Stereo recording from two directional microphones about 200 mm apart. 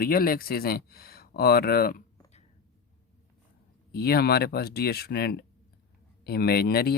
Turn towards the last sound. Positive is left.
turn(degrees=50)  # may be behind; listen again after turning